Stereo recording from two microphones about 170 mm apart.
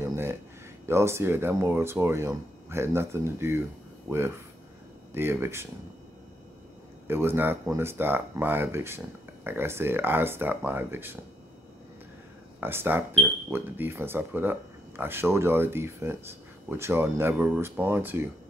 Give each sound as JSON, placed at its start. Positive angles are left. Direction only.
{"t": 0.0, "sound": "a sound", "side_deg": -15}
{"t": 0.8, "sound": "speech", "side_deg": -15}
{"t": 5.1, "sound": "speech", "side_deg": -15}
{"t": 7.1, "sound": "speech", "side_deg": -15}
{"t": 12.5, "sound": "speech", "side_deg": -15}